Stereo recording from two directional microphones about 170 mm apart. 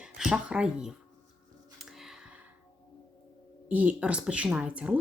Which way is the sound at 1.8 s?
Centre (ahead or behind).